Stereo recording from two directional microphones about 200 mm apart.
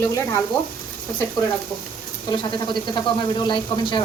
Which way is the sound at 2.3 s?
25° left (ahead or behind).